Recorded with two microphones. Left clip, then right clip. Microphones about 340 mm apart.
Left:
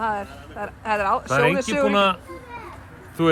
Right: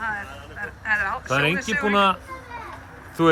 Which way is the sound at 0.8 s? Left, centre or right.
Centre.